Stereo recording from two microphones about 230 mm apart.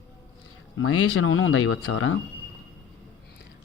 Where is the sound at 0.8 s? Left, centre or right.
Left.